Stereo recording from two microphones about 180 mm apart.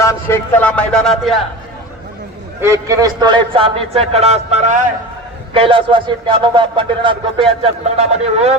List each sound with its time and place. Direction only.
0.0 s speech: 15° left (ahead or behind)
2.6 s a man's voice: 15° right (ahead or behind); by 4.9 s 40° right (ahead or behind)
5.5 s a man's voice: 30° right (ahead or behind)